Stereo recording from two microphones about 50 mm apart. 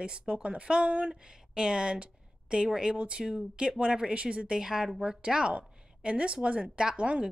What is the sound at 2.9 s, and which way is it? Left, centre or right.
Speech, right.